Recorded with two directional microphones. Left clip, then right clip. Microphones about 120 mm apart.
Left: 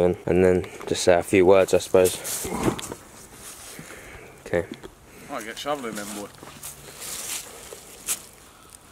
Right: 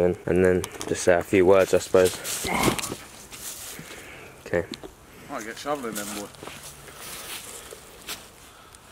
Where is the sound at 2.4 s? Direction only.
40° right (ahead or behind).